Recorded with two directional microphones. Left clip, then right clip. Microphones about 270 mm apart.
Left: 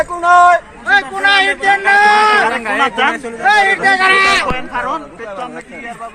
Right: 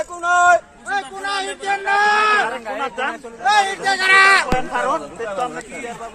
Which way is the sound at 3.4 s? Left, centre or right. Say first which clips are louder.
Left 6 dB; right.